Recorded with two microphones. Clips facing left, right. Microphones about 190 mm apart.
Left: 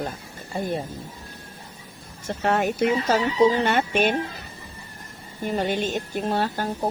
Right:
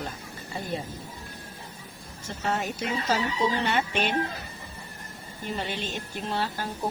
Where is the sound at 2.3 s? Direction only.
60° left (ahead or behind).